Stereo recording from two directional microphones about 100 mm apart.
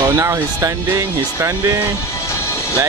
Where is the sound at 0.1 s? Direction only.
30° right (ahead or behind).